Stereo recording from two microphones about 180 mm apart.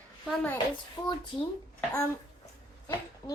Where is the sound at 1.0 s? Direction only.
20° left (ahead or behind).